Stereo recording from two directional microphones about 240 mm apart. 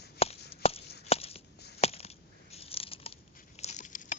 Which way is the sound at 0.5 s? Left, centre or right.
Left.